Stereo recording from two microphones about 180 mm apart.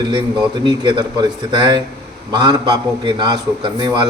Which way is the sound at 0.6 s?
25° right (ahead or behind).